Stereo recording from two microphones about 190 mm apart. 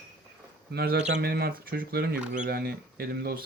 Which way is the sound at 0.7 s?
60° right (ahead or behind).